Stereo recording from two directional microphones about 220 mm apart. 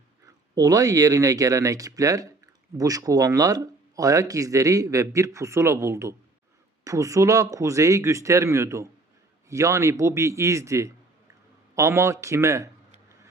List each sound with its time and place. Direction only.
0.5 s speech: 15° right (ahead or behind)